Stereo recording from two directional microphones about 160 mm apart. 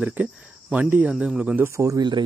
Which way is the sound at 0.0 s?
10° right (ahead or behind).